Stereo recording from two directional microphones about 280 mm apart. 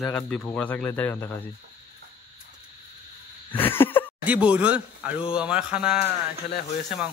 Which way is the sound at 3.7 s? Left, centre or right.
Centre.